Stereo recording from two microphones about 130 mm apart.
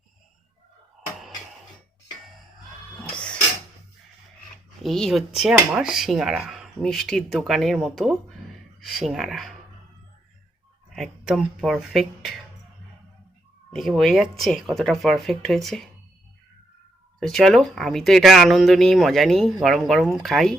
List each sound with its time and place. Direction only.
3.0 s printer: 10° left (ahead or behind)
4.8 s speech: centre (ahead or behind)
10.9 s speech: centre (ahead or behind)
13.7 s speech: centre (ahead or behind)
17.2 s speech: centre (ahead or behind)